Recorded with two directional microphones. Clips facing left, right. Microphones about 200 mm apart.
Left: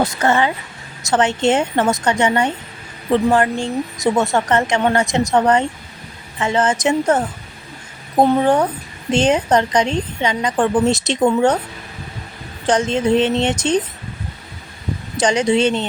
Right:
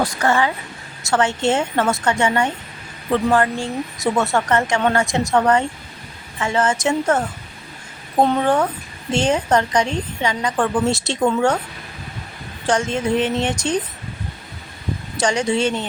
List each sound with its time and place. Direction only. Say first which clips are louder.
0.0 s a woman's voice: left 2 dB; 25° left (ahead or behind)
12.6 s speech: left 3 dB; 20° left (ahead or behind)
15.2 s speech: left 4 dB; 20° left (ahead or behind)